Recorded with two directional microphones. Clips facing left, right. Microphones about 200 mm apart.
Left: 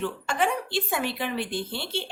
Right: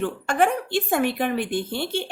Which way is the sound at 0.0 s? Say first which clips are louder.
Right 5 dB; 55° right (ahead or behind).